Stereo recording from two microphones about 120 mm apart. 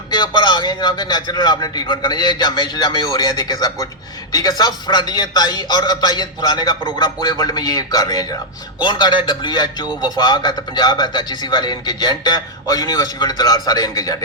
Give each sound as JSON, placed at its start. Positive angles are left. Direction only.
{"t": 0.1, "sound": "a man's voice", "side_deg": 40}
{"t": 9.8, "sound": "a man's voice", "side_deg": -10}
{"t": 10.2, "sound": "a man's voice", "side_deg": 35}